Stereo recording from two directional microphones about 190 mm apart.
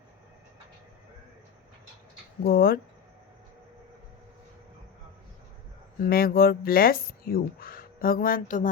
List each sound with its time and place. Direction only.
2.4 s speech: 50° left (ahead or behind)
6.0 s speech: 50° left (ahead or behind)